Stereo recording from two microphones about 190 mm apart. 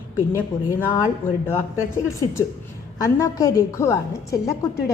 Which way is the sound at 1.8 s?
15° left (ahead or behind).